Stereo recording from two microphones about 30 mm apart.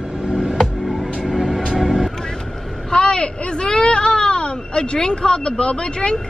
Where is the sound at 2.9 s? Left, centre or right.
Left.